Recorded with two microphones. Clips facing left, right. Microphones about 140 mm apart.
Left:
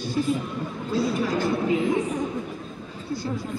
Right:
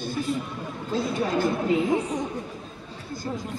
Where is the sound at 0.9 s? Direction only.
50° right (ahead or behind).